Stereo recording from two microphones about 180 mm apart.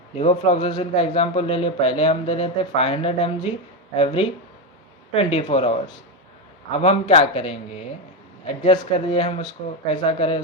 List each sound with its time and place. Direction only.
0.2 s speech: 35° left (ahead or behind)